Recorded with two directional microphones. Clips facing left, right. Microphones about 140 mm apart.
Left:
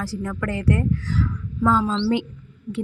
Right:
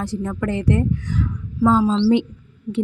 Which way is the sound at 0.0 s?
20° right (ahead or behind).